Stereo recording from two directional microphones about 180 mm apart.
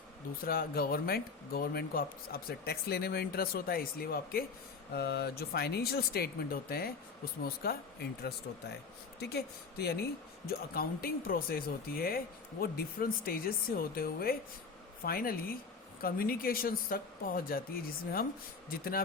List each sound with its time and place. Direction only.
0.4 s speech: 55° left (ahead or behind)
9.2 s speech: 60° left (ahead or behind)